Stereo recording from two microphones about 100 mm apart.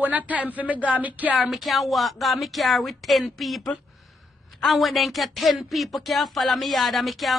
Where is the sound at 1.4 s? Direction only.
Centre (ahead or behind).